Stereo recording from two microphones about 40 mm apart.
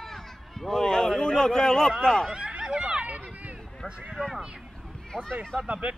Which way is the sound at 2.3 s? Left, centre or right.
Right.